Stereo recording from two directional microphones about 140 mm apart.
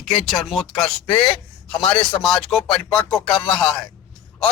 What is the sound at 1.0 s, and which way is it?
Speech, 40° left (ahead or behind).